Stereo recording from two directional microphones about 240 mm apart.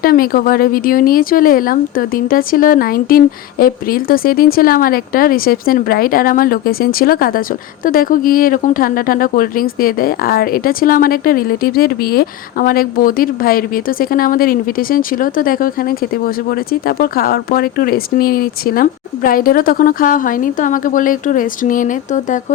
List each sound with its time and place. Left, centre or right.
0.0 s a woman's voice: left